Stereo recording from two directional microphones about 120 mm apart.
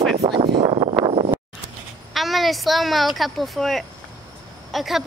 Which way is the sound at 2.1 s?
Centre (ahead or behind).